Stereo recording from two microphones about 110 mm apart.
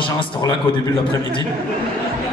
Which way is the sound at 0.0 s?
50° left (ahead or behind).